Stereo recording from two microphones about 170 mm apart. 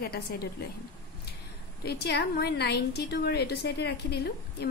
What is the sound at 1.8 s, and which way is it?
A woman's voice, 75° left (ahead or behind).